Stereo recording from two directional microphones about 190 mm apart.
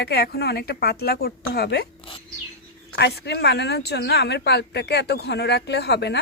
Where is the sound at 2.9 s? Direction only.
60° left (ahead or behind).